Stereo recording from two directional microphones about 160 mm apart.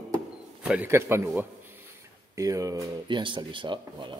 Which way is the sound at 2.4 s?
20° right (ahead or behind).